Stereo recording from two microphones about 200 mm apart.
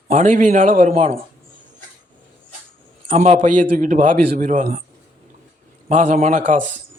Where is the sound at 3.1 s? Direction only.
35° right (ahead or behind).